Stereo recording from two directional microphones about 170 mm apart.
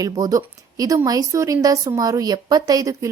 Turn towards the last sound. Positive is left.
turn(degrees=-20)  # may be behind; listen again after turning